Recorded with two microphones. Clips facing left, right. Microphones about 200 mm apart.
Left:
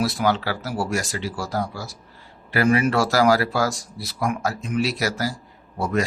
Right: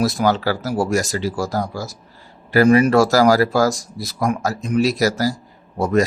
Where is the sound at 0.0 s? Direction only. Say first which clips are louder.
Right 4 dB; 45° right (ahead or behind).